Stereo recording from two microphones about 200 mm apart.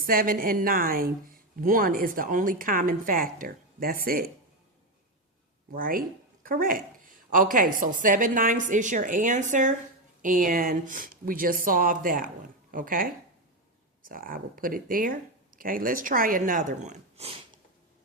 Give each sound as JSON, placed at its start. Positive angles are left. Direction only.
{"t": 0.0, "sound": "a woman's voice", "side_deg": -45}
{"t": 5.7, "sound": "a woman's voice", "side_deg": -45}